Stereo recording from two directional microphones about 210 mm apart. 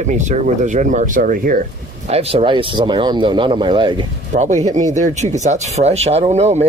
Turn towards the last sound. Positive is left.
turn(degrees=-30)  # may be behind; listen again after turning